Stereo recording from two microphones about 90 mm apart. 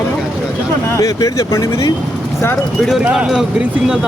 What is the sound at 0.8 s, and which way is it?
Speech, 35° left (ahead or behind).